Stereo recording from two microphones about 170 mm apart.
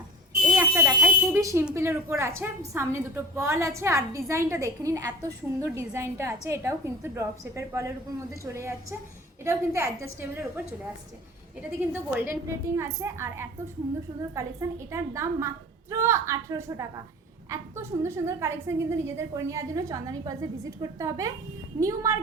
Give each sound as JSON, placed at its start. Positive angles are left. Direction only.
{"t": 0.4, "sound": "alarm", "side_deg": -10}
{"t": 1.0, "sound": "a woman's voice", "side_deg": -15}
{"t": 12.1, "sound": "a woman's voice", "side_deg": -10}